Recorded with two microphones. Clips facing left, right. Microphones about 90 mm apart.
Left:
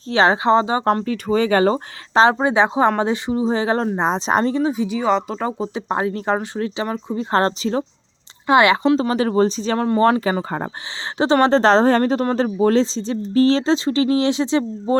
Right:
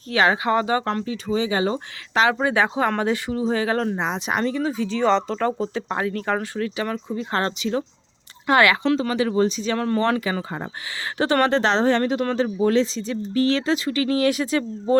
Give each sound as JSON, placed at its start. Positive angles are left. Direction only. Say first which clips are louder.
{"t": 0.1, "sound": "speech", "louder": "left 4 dB", "side_deg": 30}
{"t": 1.0, "sound": "speech", "louder": "left 5 dB", "side_deg": 55}
{"t": 2.1, "sound": "speech", "louder": "left 5 dB", "side_deg": 30}
{"t": 4.6, "sound": "speech", "louder": "left 2 dB", "side_deg": 20}
{"t": 8.4, "sound": "speech", "louder": "left 3 dB", "side_deg": 20}
{"t": 8.7, "sound": "speech", "louder": "left 4 dB", "side_deg": 30}
{"t": 11.4, "sound": "speech", "louder": "left 8 dB", "side_deg": 35}